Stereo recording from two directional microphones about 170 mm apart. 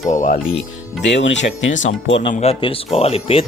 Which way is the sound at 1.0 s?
90° left.